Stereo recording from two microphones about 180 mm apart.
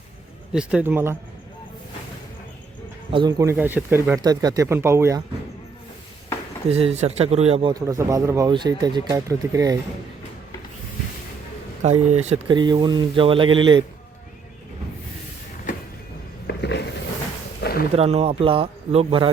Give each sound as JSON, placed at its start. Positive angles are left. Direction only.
{"t": 0.5, "sound": "speech", "side_deg": -5}
{"t": 3.1, "sound": "speech", "side_deg": -25}
{"t": 6.7, "sound": "speech", "side_deg": -35}
{"t": 7.7, "sound": "speech", "side_deg": -20}
{"t": 11.8, "sound": "speech", "side_deg": -40}
{"t": 12.5, "sound": "speech", "side_deg": -25}
{"t": 16.5, "sound": "a sound", "side_deg": 70}
{"t": 17.6, "sound": "a sound", "side_deg": 60}
{"t": 17.9, "sound": "speech", "side_deg": -35}